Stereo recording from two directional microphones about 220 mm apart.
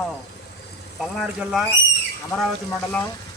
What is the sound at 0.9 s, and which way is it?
Speech, 5° right (ahead or behind).